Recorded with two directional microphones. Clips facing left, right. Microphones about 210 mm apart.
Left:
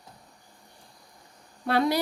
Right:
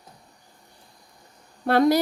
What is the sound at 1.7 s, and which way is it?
Speech, 45° right (ahead or behind).